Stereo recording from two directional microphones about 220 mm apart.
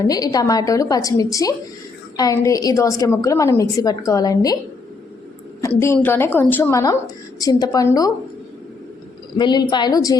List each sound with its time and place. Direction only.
0.0 s a woman's voice: 15° left (ahead or behind)
5.6 s a woman's voice: 10° left (ahead or behind)
9.4 s a woman's voice: 20° left (ahead or behind)